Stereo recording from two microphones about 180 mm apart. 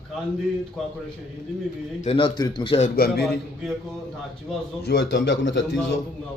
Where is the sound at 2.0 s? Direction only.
30° left (ahead or behind).